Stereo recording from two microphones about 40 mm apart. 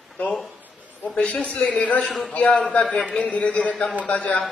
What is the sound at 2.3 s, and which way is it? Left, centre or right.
Speech, left.